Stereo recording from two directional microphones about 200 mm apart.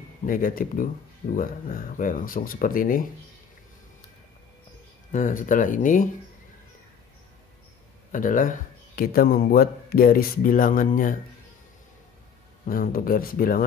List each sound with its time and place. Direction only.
0.2 s speech: 45° left (ahead or behind)
5.1 s speech: 40° left (ahead or behind)
8.1 s speech: 40° left (ahead or behind)
12.6 s speech: 45° left (ahead or behind)